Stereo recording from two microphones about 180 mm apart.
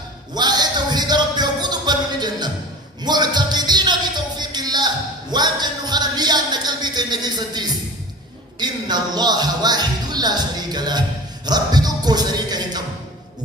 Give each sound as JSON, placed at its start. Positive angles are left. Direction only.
{"t": 0.3, "sound": "a sound", "side_deg": -25}
{"t": 3.0, "sound": "speech", "side_deg": -25}
{"t": 4.4, "sound": "music", "side_deg": -25}
{"t": 5.3, "sound": "speech", "side_deg": -25}